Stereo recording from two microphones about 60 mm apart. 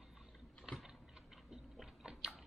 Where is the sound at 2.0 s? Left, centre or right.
Centre.